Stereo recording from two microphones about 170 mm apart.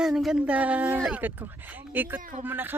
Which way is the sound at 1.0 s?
10° right (ahead or behind).